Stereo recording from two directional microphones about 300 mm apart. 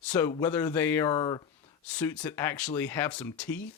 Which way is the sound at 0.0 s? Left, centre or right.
Centre.